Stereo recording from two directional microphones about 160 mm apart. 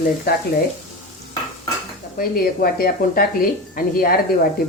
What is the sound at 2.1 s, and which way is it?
A woman's voice, 65° left (ahead or behind).